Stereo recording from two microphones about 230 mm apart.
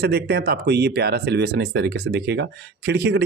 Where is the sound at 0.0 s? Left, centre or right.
Right.